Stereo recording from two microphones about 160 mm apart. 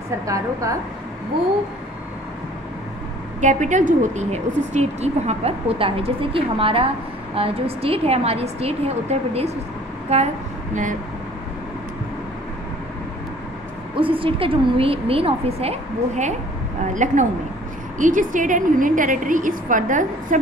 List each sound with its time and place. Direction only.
0.3 s a woman's voice: 20° right (ahead or behind)
3.3 s a woman's voice: 50° right (ahead or behind)
13.9 s a woman's voice: 35° right (ahead or behind); by 20.3 s 55° right (ahead or behind)